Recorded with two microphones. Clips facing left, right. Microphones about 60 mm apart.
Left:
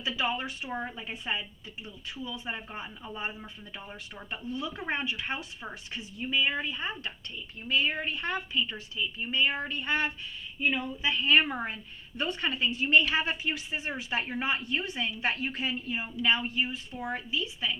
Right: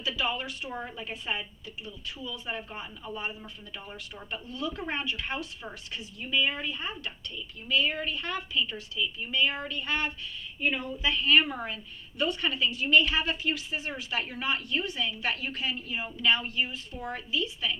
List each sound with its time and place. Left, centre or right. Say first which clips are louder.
0.2 s speech: left 2 dB; left
4.3 s speech: even; left